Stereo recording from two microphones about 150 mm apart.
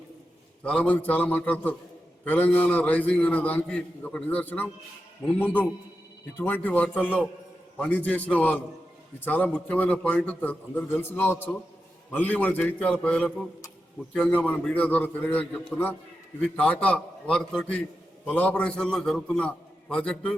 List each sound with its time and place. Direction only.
0.6 s a man's voice: 10° left (ahead or behind)